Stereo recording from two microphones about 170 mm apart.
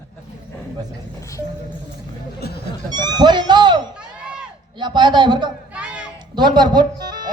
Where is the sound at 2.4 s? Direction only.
70° left (ahead or behind).